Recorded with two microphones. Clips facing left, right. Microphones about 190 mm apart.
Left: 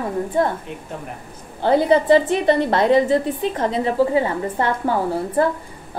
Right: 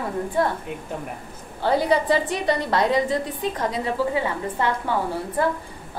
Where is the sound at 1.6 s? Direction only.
25° left (ahead or behind).